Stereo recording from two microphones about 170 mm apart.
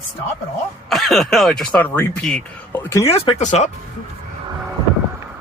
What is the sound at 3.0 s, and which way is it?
Speech, 35° left (ahead or behind).